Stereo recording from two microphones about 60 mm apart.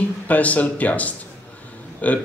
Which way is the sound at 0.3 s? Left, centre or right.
Left.